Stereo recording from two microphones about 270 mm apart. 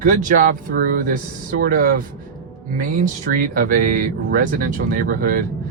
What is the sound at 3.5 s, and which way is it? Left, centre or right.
Speech, right.